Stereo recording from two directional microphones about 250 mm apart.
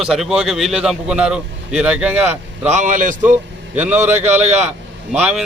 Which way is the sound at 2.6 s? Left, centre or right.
Right.